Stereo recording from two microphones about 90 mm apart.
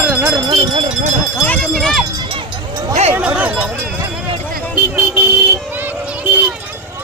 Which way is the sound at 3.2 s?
15° right (ahead or behind).